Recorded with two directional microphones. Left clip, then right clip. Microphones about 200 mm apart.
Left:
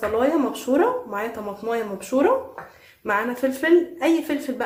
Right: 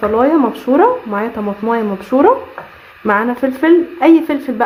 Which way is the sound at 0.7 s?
30° right (ahead or behind).